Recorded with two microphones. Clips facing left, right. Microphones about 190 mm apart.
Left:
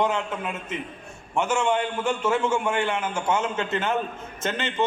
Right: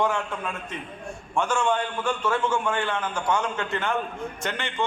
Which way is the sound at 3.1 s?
25° left (ahead or behind).